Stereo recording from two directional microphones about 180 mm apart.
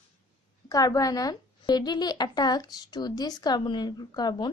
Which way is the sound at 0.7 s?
20° left (ahead or behind).